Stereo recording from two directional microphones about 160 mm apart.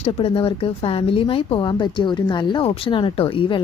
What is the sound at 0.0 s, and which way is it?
Speech, 40° left (ahead or behind).